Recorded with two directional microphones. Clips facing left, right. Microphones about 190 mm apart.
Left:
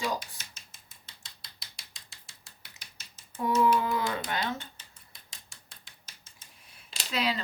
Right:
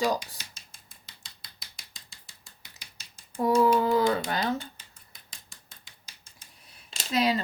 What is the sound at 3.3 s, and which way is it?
Speech, 35° right (ahead or behind).